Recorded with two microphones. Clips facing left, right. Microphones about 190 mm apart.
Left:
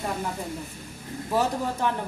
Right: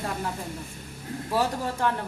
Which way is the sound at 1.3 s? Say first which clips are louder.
Left 1 dB; 15° left (ahead or behind).